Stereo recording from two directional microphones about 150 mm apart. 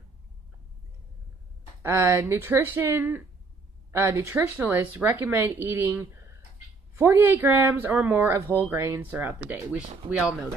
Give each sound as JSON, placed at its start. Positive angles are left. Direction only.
{"t": 1.8, "sound": "speech", "side_deg": -15}